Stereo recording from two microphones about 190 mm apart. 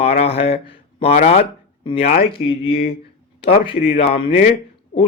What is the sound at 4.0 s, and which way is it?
Speech, 30° left (ahead or behind).